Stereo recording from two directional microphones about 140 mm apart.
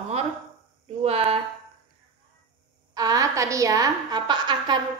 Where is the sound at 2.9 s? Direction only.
25° right (ahead or behind).